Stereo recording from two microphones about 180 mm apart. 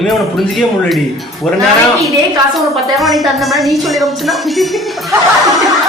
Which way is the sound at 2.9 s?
Centre (ahead or behind).